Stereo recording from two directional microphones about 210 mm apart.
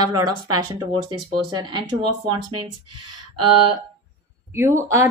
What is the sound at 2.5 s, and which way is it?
Speech, 90° right.